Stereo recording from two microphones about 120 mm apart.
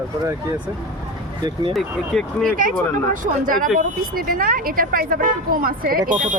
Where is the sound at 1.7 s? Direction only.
5° left (ahead or behind).